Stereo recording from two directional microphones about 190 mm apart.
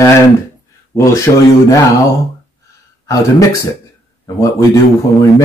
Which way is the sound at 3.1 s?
15° left (ahead or behind).